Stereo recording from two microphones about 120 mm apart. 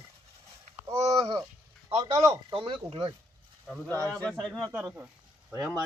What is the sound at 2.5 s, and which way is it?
Speech, 50° right (ahead or behind).